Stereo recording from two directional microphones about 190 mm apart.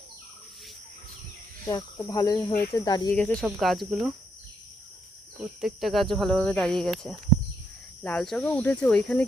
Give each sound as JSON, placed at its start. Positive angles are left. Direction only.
{"t": 1.6, "sound": "speech", "side_deg": 15}
{"t": 3.4, "sound": "speech", "side_deg": 0}
{"t": 5.4, "sound": "speech", "side_deg": 0}